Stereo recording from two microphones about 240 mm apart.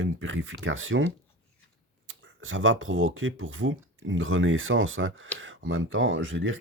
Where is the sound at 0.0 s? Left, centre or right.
Right.